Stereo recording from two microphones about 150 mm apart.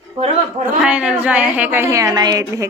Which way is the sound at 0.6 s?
10° right (ahead or behind).